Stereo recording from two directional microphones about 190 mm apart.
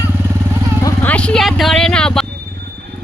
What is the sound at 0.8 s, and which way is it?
Music, 15° left (ahead or behind).